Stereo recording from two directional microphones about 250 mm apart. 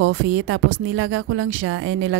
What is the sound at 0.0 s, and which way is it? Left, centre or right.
A woman's voice, right.